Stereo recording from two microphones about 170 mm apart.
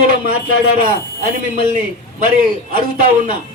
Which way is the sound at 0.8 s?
60° right (ahead or behind).